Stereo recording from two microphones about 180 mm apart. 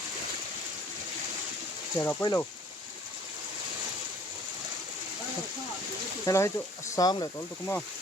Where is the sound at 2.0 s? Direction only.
15° left (ahead or behind).